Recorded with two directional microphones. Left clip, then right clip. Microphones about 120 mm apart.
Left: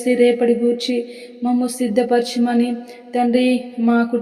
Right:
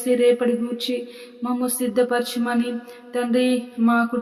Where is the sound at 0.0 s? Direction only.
25° left (ahead or behind).